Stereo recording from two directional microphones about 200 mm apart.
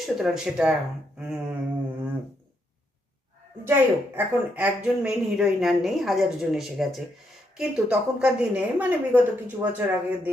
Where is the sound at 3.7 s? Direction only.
10° right (ahead or behind).